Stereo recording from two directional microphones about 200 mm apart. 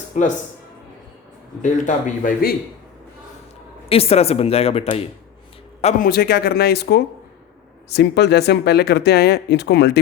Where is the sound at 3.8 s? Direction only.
30° left (ahead or behind).